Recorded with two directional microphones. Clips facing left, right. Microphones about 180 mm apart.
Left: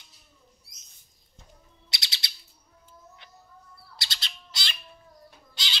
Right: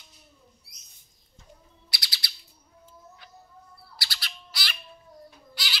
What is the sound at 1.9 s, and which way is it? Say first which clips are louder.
Bird: left 1 dB; 25° left (ahead or behind).